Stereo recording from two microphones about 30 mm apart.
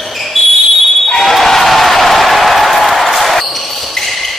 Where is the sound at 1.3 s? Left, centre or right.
Centre.